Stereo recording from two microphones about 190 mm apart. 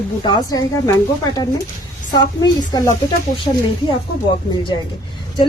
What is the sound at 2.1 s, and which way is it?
Speech, 20° left (ahead or behind).